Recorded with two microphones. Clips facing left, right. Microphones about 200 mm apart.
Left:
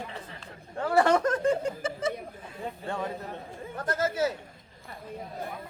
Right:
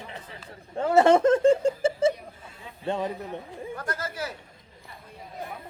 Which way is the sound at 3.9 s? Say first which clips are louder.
Left 9 dB; 25° left (ahead or behind).